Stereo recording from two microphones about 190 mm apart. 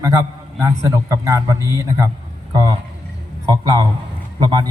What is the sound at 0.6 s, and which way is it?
A man's voice, 15° right (ahead or behind).